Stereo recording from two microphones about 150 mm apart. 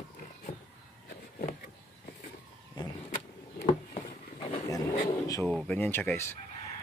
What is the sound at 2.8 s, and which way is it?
Vehicle, 30° left (ahead or behind).